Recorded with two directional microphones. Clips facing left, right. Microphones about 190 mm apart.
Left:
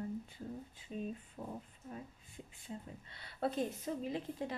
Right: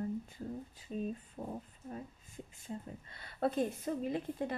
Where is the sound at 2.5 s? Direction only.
45° right (ahead or behind).